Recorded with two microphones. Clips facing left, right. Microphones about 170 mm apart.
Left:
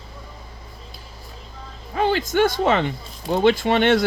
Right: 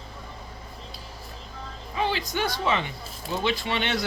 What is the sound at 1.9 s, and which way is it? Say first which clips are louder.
Speech: left 8 dB; 50° left (ahead or behind).